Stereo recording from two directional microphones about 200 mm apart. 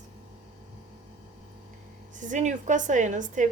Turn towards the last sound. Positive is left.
turn(degrees=-40)  # may be behind; listen again after turning